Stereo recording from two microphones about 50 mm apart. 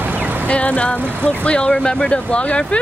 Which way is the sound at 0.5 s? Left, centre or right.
Left.